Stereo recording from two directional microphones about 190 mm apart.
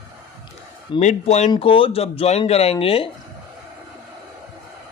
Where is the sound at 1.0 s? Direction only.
35° left (ahead or behind).